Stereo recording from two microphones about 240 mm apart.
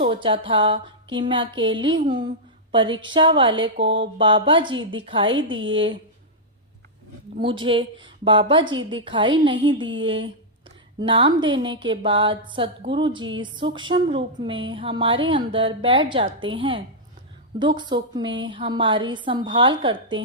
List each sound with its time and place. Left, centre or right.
0.0 s a woman's voice: right
5.3 s speech: right
5.7 s a woman's voice: right
7.6 s a woman's voice: right